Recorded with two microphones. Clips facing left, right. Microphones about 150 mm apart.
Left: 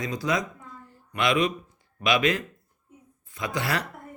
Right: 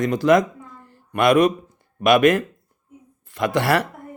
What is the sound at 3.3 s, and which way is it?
Speech, 70° right (ahead or behind).